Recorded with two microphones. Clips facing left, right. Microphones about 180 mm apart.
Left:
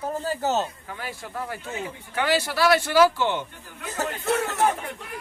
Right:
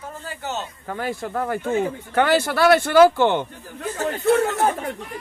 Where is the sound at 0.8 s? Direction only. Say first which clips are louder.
Right 9 dB; 50° right (ahead or behind).